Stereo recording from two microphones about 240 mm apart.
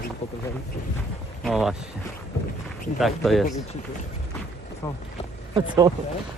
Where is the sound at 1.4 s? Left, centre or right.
Centre.